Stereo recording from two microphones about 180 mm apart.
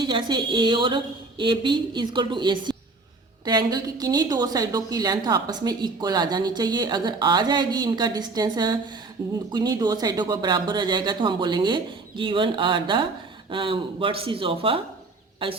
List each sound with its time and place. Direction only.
0.0 s a woman's voice: 25° right (ahead or behind)